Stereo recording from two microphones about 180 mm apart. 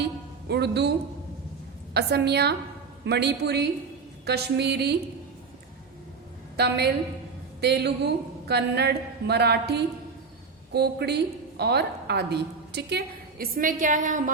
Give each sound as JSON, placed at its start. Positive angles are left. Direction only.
{"t": 0.0, "sound": "music", "side_deg": -65}
{"t": 1.9, "sound": "a woman's voice", "side_deg": -65}
{"t": 6.6, "sound": "a woman's voice", "side_deg": -65}
{"t": 13.4, "sound": "a woman's voice", "side_deg": -50}